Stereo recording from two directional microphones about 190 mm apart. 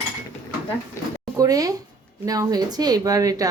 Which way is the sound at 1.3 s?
20° right (ahead or behind).